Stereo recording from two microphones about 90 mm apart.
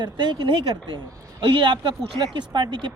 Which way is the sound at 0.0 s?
60° right (ahead or behind).